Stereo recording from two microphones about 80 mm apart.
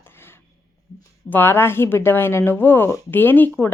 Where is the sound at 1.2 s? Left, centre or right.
Left.